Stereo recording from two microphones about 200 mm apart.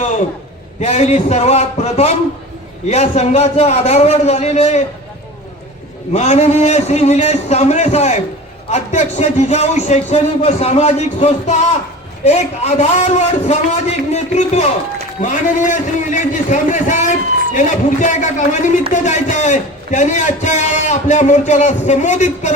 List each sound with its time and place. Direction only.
0.8 s a man's voice: 35° left (ahead or behind)
6.1 s a man's voice: 35° left (ahead or behind)